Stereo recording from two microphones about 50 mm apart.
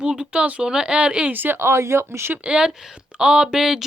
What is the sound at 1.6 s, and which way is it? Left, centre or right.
Speech, right.